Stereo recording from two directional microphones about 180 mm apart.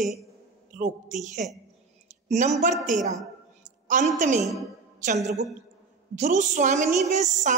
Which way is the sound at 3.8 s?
45° right (ahead or behind).